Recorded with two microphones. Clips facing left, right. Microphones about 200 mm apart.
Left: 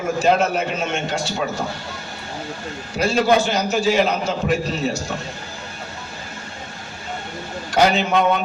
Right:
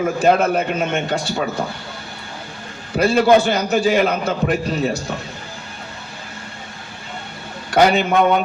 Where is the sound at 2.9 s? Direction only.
55° right (ahead or behind).